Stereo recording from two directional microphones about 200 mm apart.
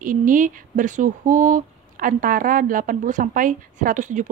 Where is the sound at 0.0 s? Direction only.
40° right (ahead or behind).